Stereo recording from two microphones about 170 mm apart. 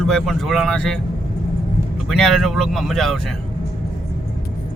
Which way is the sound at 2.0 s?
Centre (ahead or behind).